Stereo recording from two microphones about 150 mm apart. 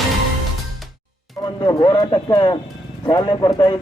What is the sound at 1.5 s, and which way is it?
A man's voice, 30° left (ahead or behind).